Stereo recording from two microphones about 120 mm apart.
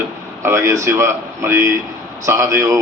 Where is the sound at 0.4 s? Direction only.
25° right (ahead or behind).